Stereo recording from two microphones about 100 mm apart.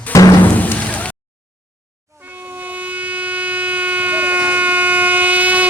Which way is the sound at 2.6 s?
15° right (ahead or behind).